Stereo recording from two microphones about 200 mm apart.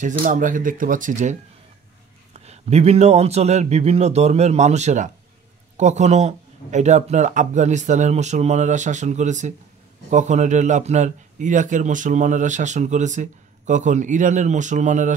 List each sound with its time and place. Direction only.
0.2 s speech: 40° right (ahead or behind)
2.3 s speech: 35° right (ahead or behind)